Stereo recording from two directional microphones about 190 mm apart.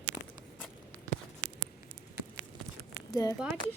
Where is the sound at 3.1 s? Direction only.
20° left (ahead or behind).